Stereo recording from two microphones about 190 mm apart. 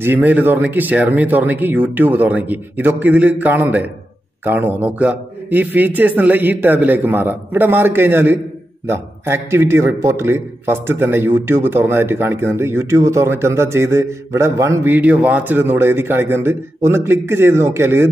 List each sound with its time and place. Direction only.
0.0 s a man's voice: 10° right (ahead or behind)